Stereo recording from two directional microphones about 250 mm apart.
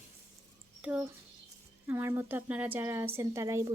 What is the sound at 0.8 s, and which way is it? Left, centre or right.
A woman's voice, centre.